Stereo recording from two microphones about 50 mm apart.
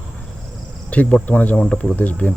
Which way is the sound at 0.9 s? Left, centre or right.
Left.